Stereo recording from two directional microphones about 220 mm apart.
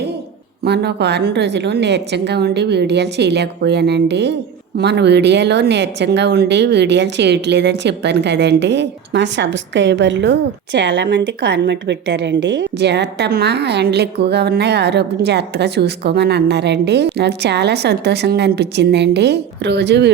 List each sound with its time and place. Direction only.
0.6 s speech: 50° right (ahead or behind)